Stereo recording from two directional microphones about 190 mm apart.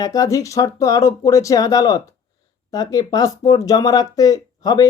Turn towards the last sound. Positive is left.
turn(degrees=20)  # may be behind; listen again after turning